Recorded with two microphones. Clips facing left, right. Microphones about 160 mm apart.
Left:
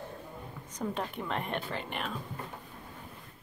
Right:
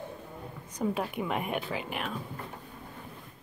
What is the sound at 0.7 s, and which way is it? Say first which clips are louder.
A woman's voice: right 4 dB; 10° right (ahead or behind).